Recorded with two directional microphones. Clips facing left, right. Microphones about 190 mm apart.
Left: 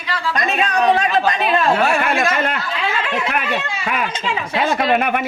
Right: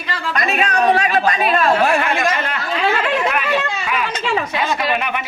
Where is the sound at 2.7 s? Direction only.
40° right (ahead or behind).